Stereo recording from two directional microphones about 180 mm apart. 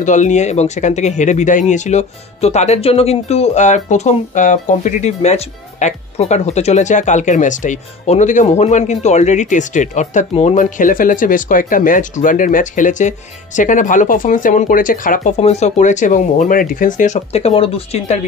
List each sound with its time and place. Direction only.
0.0 s speech: 40° left (ahead or behind)